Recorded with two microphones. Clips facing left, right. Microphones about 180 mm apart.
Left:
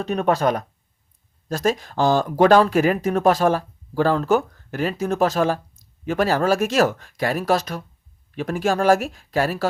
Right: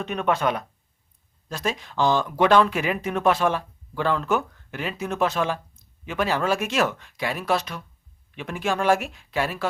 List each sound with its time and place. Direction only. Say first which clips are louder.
0.0 s speech: left 4 dB; 40° left (ahead or behind)